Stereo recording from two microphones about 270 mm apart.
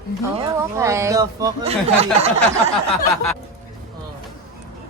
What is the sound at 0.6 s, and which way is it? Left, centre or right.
Speech, centre.